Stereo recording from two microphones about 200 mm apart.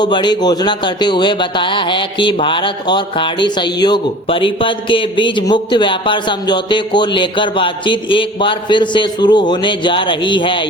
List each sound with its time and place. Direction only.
0.0 s speech: 20° left (ahead or behind)